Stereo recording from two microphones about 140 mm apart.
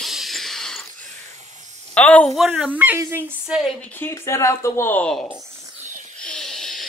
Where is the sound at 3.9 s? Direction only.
15° left (ahead or behind).